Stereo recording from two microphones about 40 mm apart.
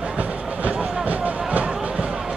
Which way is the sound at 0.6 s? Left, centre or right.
Right.